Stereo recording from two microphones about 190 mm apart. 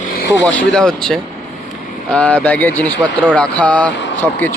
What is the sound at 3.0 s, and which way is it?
Speech, 10° right (ahead or behind).